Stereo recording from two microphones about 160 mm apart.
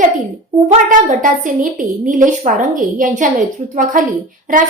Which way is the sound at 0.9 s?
55° right (ahead or behind).